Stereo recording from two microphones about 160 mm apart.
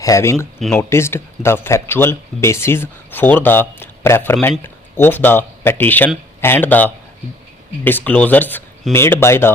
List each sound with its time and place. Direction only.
0.0 s speech: 20° left (ahead or behind)